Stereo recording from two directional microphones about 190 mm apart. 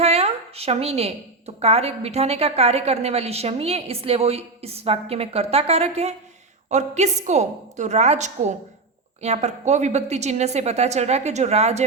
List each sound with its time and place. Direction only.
0.0 s speech: 35° right (ahead or behind)